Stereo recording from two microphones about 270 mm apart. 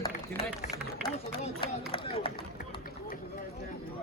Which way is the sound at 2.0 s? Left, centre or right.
Centre.